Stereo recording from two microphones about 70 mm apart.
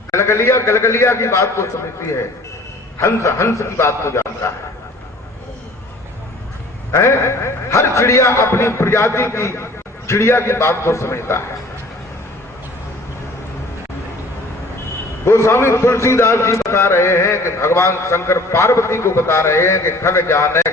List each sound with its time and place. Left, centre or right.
0.1 s a man's voice: left
6.9 s a man's voice: left
15.2 s a man's voice: left